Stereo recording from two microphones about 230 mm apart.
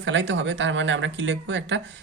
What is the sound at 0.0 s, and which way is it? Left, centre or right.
Speech, right.